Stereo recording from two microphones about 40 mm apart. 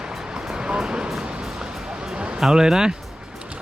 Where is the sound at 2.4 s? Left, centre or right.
Centre.